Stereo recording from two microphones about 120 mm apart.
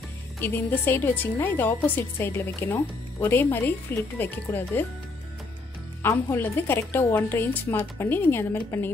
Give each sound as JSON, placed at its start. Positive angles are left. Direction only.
{"t": 0.4, "sound": "a woman's voice", "side_deg": 15}
{"t": 6.3, "sound": "speech", "side_deg": 20}